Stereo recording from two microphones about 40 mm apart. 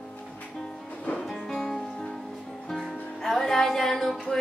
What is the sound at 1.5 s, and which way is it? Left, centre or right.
Music, centre.